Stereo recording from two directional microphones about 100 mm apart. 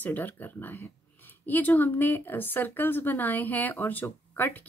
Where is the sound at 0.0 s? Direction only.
20° left (ahead or behind).